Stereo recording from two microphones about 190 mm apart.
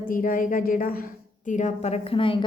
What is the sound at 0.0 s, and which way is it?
A woman's voice, 45° left (ahead or behind).